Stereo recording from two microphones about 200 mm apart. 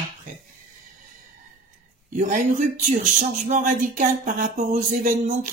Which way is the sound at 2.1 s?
40° right (ahead or behind).